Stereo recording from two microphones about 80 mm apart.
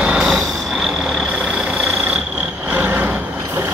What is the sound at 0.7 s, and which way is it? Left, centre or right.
Frog, centre.